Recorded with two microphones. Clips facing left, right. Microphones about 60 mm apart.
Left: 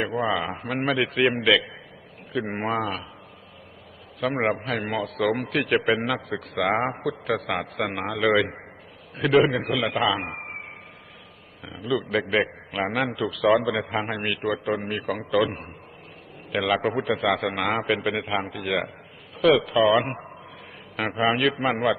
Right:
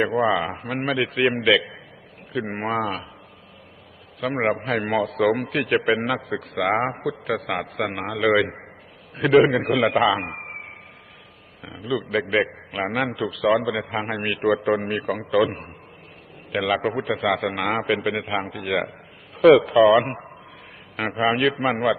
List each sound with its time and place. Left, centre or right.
0.1 s a man's voice: centre
0.4 s a man's voice: centre
4.4 s a man's voice: centre; by 5.3 s right
5.3 s a man's voice: centre
9.5 s a man's voice: right
9.7 s a man's voice: right
10.2 s a sound: centre
11.6 s a man's voice: centre
14.5 s a man's voice: right
15.0 s a man's voice: centre
19.4 s a man's voice: right
19.8 s a man's voice: centre